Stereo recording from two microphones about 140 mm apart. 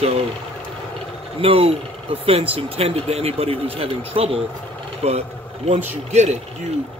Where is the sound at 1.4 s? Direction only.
45° right (ahead or behind).